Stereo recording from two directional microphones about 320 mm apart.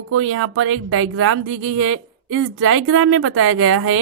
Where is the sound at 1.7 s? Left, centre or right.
Right.